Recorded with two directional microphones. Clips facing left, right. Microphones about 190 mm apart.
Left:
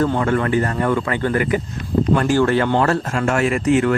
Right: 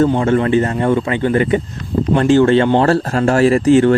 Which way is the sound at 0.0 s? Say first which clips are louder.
Right 5 dB; 25° right (ahead or behind).